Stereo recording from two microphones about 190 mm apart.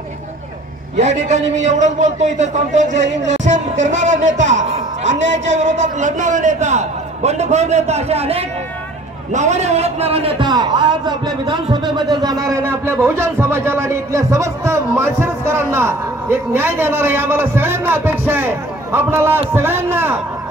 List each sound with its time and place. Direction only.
0.9 s a man's voice: 40° right (ahead or behind); by 20.2 s 10° right (ahead or behind)